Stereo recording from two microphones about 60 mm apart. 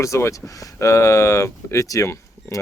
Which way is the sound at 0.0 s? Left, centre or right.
Left.